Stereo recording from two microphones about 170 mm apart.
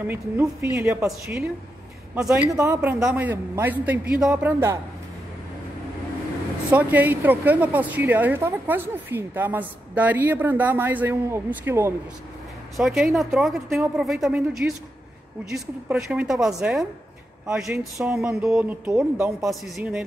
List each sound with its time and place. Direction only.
0.0 s a woman's voice: 15° right (ahead or behind)
2.1 s a woman's voice: 5° right (ahead or behind)
2.5 s a woman's voice: 15° right (ahead or behind)
6.7 s a woman's voice: 10° right (ahead or behind)
12.7 s a woman's voice: centre (ahead or behind)